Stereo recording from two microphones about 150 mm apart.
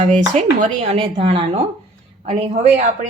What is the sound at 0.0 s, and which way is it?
Speech, 55° right (ahead or behind).